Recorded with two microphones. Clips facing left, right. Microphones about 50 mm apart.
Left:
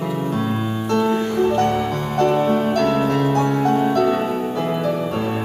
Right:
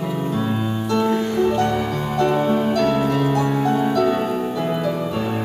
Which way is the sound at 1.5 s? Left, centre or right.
Left.